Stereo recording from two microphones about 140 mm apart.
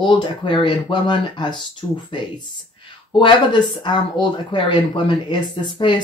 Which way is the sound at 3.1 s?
35° left (ahead or behind).